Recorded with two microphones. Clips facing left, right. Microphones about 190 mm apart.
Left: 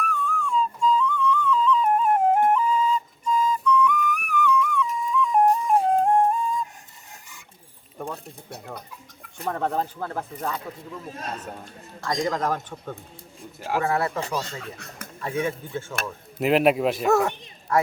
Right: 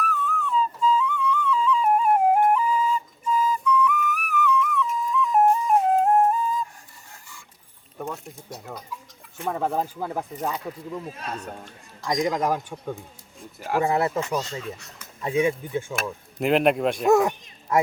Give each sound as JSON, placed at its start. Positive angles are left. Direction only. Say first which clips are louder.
{"t": 0.0, "sound": "music", "louder": "even", "side_deg": -5}
{"t": 8.0, "sound": "a sound", "louder": "right 1 dB", "side_deg": 0}
{"t": 8.4, "sound": "speech", "louder": "even", "side_deg": 60}
{"t": 9.5, "sound": "speech", "louder": "even", "side_deg": -5}
{"t": 11.1, "sound": "a man's voice", "louder": "even", "side_deg": 40}
{"t": 12.0, "sound": "speech", "louder": "right 2 dB", "side_deg": -15}
{"t": 13.6, "sound": "speech", "louder": "right 2 dB", "side_deg": 0}
{"t": 13.8, "sound": "speech", "louder": "right 2 dB", "side_deg": -20}
{"t": 14.8, "sound": "speech", "louder": "left 6 dB", "side_deg": 55}
{"t": 15.2, "sound": "speech", "louder": "right 4 dB", "side_deg": -15}
{"t": 16.4, "sound": "speech", "louder": "left 1 dB", "side_deg": 0}
{"t": 17.7, "sound": "speech", "louder": "right 1 dB", "side_deg": -20}